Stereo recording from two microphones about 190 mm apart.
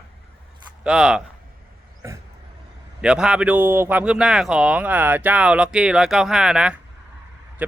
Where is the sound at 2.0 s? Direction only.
15° right (ahead or behind).